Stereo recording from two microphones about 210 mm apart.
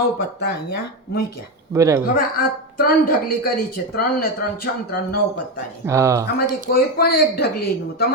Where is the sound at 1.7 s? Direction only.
15° right (ahead or behind).